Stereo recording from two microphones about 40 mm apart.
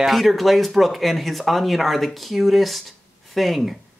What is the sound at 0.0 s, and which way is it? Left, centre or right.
A man's voice, centre.